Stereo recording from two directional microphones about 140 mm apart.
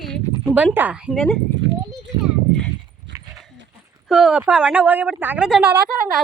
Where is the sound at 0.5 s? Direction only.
10° right (ahead or behind).